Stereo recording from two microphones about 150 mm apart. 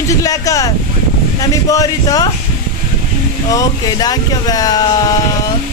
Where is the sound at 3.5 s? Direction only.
25° left (ahead or behind).